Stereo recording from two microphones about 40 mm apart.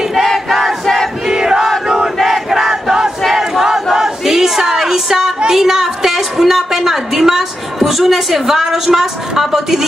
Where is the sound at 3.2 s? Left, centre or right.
Centre.